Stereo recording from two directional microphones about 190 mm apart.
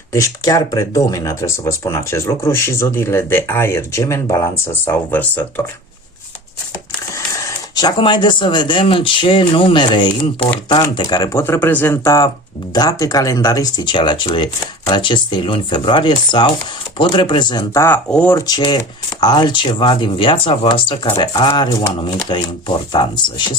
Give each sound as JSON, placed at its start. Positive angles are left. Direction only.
{"t": 0.1, "sound": "speech", "side_deg": 15}
{"t": 7.1, "sound": "speech", "side_deg": 20}
{"t": 17.8, "sound": "speech", "side_deg": 10}